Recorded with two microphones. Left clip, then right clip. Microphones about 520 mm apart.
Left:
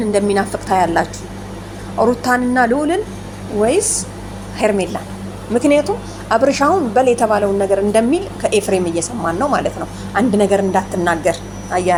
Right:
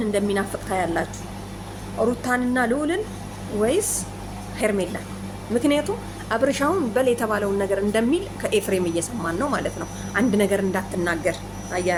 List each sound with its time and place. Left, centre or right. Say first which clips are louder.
0.3 s a woman's voice: left 9 dB; right